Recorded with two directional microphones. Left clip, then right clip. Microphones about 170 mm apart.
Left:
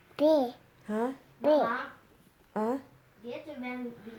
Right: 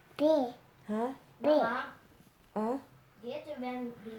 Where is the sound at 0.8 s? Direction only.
40° left (ahead or behind).